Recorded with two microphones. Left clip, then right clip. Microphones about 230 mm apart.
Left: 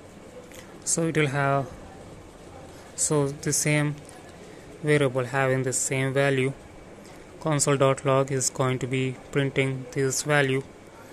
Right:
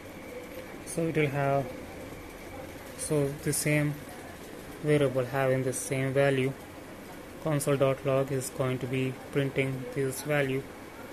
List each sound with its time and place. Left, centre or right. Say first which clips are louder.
0.9 s speech: left 4 dB; centre
3.1 s speech: left 3 dB; centre